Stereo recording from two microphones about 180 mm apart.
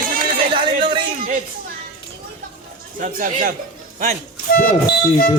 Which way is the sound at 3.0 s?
50° right (ahead or behind).